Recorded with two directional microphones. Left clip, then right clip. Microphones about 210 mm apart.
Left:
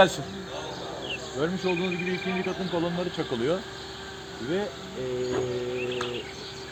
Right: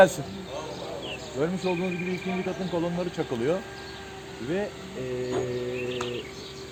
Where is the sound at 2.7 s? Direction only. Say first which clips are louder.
Even; 25° right (ahead or behind).